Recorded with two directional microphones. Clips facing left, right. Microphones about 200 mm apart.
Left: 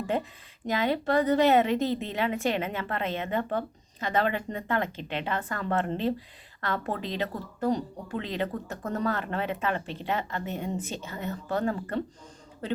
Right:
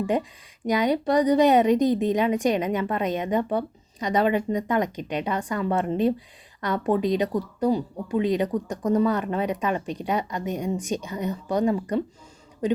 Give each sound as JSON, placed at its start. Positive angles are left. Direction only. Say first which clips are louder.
{"t": 0.7, "sound": "a woman's voice", "louder": "right 4 dB", "side_deg": -15}